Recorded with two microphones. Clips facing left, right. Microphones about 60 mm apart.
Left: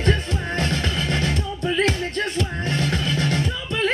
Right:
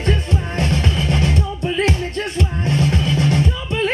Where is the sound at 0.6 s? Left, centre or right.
Right.